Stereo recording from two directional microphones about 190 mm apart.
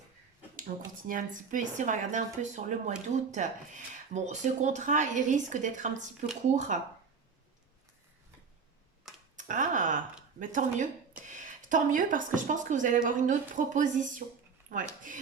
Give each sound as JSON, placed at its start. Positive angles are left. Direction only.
{"t": 0.7, "sound": "speech", "side_deg": -45}
{"t": 9.3, "sound": "computer keyboard", "side_deg": -40}
{"t": 10.4, "sound": "speech", "side_deg": -40}